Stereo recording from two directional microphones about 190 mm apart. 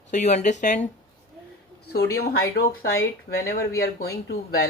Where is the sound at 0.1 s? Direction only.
40° left (ahead or behind).